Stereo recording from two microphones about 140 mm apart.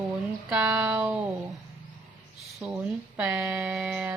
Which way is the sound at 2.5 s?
5° right (ahead or behind).